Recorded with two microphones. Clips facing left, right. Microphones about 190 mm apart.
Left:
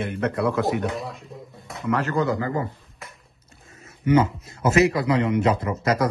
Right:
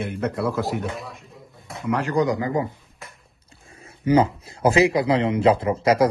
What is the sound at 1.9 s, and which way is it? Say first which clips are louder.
Speech: right 2 dB; 15° right (ahead or behind).